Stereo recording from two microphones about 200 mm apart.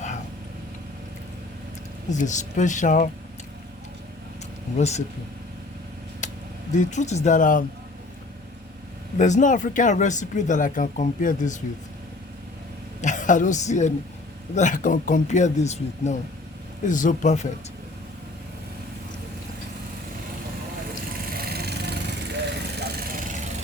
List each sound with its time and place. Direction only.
2.0 s speech: 35° left (ahead or behind)
4.8 s speech: 35° left (ahead or behind)
6.2 s vehicle: 40° left (ahead or behind)
6.7 s speech: 35° left (ahead or behind)
9.1 s speech: 40° left (ahead or behind)
13.0 s a woman's voice: 40° left (ahead or behind)
21.2 s vehicle: 50° right (ahead or behind)